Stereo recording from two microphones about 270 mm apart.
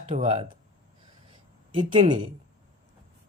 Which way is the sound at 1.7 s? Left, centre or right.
Centre.